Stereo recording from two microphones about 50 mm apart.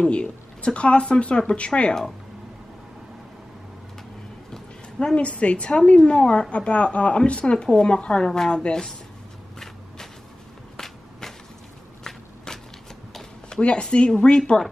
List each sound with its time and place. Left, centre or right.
0.0 s a woman's voice: left
5.1 s a woman's voice: left
10.8 s walk: centre
13.5 s a woman's voice: left